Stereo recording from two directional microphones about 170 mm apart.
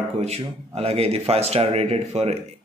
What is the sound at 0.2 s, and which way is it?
A man's voice, 40° right (ahead or behind).